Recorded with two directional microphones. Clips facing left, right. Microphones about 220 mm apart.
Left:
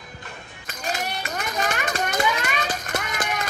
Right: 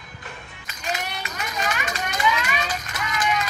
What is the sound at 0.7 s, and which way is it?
Children playing, 45° left (ahead or behind).